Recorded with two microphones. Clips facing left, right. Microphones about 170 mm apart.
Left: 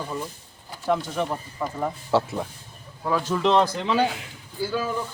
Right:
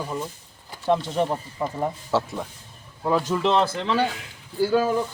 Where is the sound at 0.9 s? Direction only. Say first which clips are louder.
Right 3 dB; 30° right (ahead or behind).